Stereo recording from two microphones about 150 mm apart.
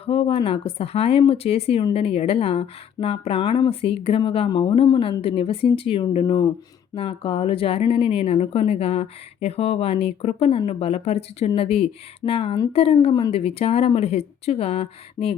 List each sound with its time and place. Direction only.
0.0 s a woman's voice: 40° left (ahead or behind)